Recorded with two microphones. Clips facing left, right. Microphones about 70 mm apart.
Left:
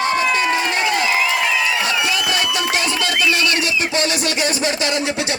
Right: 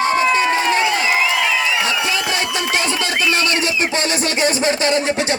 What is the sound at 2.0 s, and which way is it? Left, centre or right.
Music, right.